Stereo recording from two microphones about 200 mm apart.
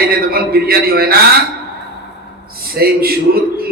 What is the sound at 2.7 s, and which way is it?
Speech, 50° right (ahead or behind).